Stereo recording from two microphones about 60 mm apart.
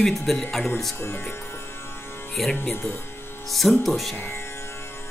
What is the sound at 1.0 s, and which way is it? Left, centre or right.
Speech, left.